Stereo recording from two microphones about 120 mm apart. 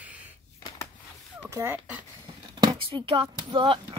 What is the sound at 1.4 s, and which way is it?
Speech, 20° right (ahead or behind).